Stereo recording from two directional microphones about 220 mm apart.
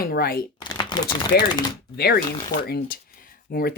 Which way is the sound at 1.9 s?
45° left (ahead or behind).